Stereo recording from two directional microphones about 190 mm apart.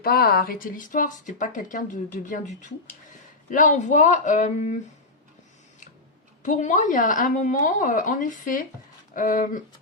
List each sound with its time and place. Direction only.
0.0 s speech: 55° left (ahead or behind)
6.4 s speech: 40° left (ahead or behind)